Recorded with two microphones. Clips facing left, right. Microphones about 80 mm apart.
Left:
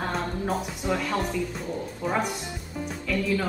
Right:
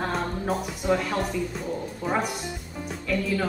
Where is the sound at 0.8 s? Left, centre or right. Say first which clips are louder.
Right 4 dB; centre.